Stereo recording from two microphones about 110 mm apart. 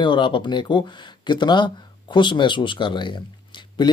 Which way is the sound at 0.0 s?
45° left (ahead or behind).